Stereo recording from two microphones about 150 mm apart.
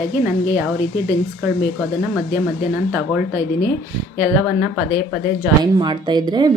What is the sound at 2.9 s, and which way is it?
Speech, 15° right (ahead or behind).